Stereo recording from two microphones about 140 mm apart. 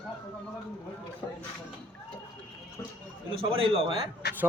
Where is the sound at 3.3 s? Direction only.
40° right (ahead or behind).